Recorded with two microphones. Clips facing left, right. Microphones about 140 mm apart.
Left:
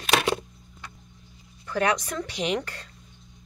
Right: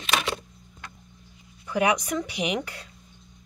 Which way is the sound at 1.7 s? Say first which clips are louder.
Right 2 dB; 15° right (ahead or behind).